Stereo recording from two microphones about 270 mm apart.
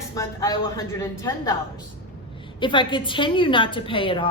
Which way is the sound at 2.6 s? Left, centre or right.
Centre.